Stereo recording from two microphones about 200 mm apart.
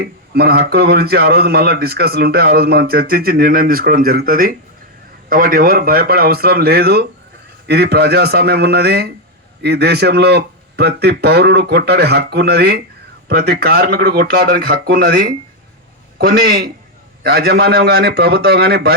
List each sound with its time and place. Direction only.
0.0 s speech: 50° right (ahead or behind)